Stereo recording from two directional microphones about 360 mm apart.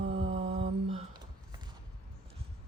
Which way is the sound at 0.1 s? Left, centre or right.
Centre.